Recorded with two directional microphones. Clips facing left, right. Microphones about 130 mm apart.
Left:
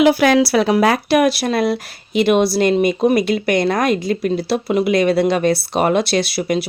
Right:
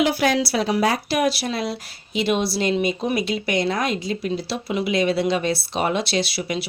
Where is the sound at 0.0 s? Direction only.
70° left (ahead or behind).